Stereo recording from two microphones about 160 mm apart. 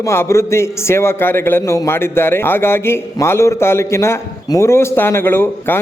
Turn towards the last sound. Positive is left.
turn(degrees=15)  # may be behind; listen again after turning